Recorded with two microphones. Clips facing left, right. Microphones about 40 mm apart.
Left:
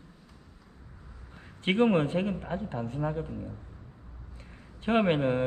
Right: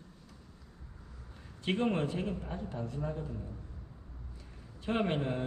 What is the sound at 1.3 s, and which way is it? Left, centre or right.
A man's voice, left.